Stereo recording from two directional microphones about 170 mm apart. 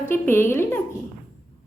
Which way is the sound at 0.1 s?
15° left (ahead or behind).